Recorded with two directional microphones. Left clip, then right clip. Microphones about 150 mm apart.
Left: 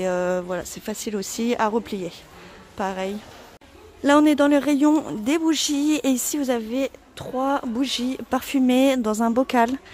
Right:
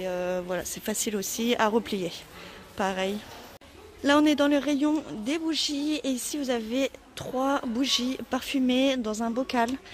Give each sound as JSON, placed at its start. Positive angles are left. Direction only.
{"t": 0.0, "sound": "a man's voice", "side_deg": 35}
{"t": 0.4, "sound": "speech", "side_deg": 15}
{"t": 0.8, "sound": "speech", "side_deg": 5}
{"t": 1.2, "sound": "speech", "side_deg": 20}
{"t": 1.7, "sound": "speech", "side_deg": 5}
{"t": 4.0, "sound": "a man's voice", "side_deg": 20}
{"t": 6.7, "sound": "speech", "side_deg": 15}